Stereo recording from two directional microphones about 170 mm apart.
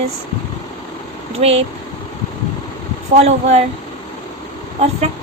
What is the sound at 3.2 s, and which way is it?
Speech, 40° right (ahead or behind).